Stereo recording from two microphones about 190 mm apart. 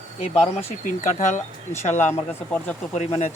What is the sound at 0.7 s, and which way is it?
Speech, 40° left (ahead or behind).